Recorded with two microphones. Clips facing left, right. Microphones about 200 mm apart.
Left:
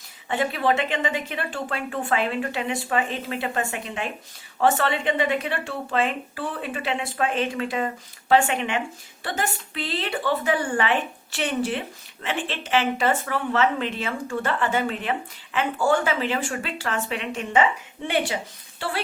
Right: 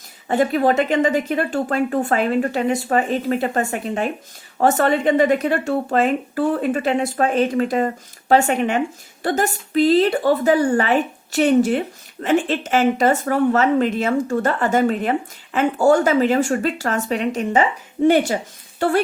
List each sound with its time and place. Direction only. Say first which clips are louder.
0.3 s a woman's voice: right 6 dB; 45° right (ahead or behind)